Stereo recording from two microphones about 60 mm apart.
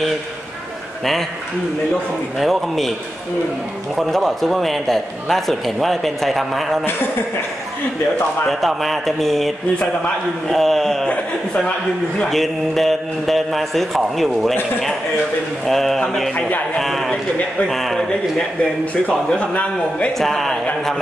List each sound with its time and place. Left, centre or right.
2.3 s a man's voice: centre
3.9 s a man's voice: centre
8.5 s a man's voice: centre
10.5 s a man's voice: centre
11.1 s a man's voice: centre
12.2 s a man's voice: centre
16.3 s a man's voice: left
16.7 s a man's voice: centre
18.6 s a man's voice: left
20.2 s a man's voice: centre